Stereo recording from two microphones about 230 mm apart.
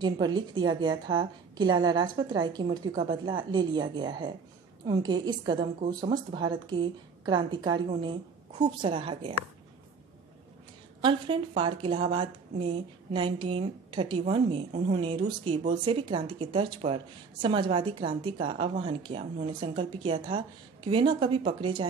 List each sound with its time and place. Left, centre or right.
0.0 s a woman's voice: centre
11.0 s a woman's voice: right